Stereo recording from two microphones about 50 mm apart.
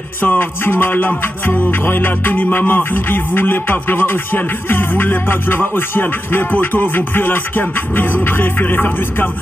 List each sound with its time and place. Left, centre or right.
0.2 s music: left